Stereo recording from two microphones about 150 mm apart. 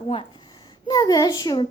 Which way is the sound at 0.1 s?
40° left (ahead or behind).